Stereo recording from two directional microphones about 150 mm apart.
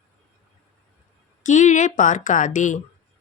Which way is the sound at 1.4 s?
55° left (ahead or behind).